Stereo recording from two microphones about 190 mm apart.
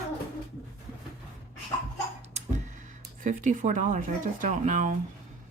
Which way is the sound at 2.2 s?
35° right (ahead or behind).